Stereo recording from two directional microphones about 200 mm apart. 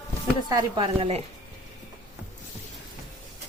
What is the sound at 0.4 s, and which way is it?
Speech, 20° right (ahead or behind).